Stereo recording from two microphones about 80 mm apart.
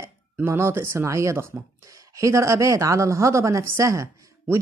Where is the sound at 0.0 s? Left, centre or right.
Right.